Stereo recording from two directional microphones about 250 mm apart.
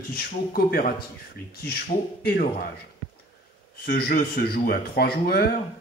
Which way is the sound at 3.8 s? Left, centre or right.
Left.